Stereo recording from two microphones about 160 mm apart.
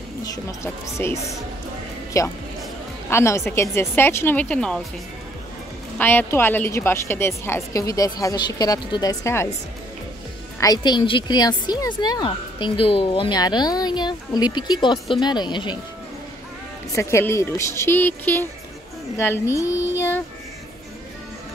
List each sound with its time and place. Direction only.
0.2 s a woman's voice: 20° left (ahead or behind); by 4.8 s 5° left (ahead or behind)
5.9 s a woman's voice: 10° left (ahead or behind)
10.6 s a woman's voice: 25° left (ahead or behind)
16.9 s a woman's voice: 20° left (ahead or behind)